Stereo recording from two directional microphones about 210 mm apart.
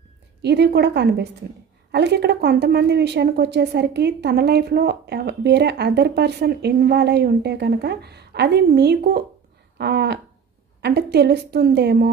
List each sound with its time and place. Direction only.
0.4 s a woman's voice: 50° right (ahead or behind)